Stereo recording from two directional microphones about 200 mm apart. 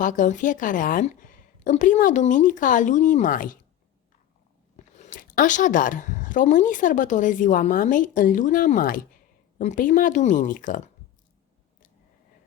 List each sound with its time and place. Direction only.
0.0 s speech: 40° left (ahead or behind)
4.9 s speech: 40° left (ahead or behind)